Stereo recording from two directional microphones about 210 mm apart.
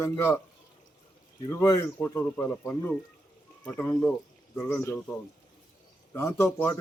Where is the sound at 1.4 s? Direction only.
15° left (ahead or behind).